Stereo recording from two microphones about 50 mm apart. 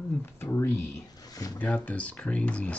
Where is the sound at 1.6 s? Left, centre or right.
Left.